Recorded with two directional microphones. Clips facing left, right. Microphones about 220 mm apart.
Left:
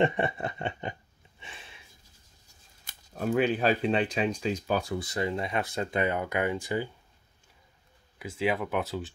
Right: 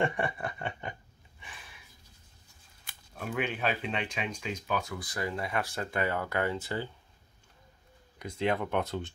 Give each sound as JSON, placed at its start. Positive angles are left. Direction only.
{"t": 0.0, "sound": "snicker", "side_deg": 25}
{"t": 1.4, "sound": "a sound", "side_deg": 25}
{"t": 2.8, "sound": "speech", "side_deg": 40}
{"t": 8.2, "sound": "speech", "side_deg": 5}